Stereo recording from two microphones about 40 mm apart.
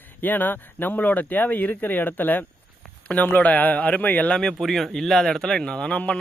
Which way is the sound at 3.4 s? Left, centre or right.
Left.